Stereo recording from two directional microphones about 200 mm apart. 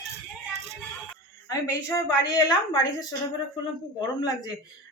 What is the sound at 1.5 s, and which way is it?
A woman's voice, 20° left (ahead or behind).